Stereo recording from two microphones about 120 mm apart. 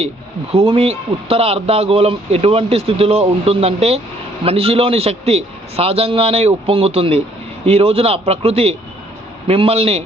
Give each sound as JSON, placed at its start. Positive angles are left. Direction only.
{"t": 0.5, "sound": "a man's voice", "side_deg": -55}